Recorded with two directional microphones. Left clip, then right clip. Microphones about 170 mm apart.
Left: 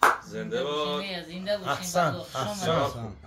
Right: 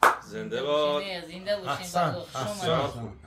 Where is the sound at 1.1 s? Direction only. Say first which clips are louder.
Even; 20° right (ahead or behind).